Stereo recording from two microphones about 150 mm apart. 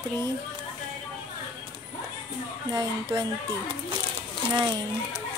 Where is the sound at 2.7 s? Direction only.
30° right (ahead or behind).